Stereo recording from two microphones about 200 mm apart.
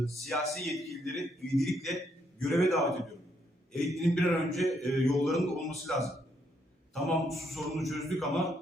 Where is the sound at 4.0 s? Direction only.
Centre (ahead or behind).